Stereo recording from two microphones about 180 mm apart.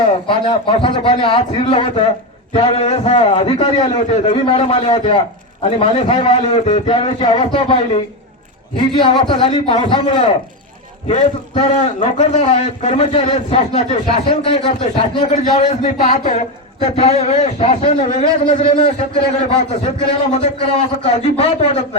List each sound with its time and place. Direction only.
0.3 s a man's voice: 30° left (ahead or behind)
9.5 s a man's voice: 40° left (ahead or behind)
11.1 s a man's voice: 40° left (ahead or behind)
16.8 s a man's voice: 35° left (ahead or behind)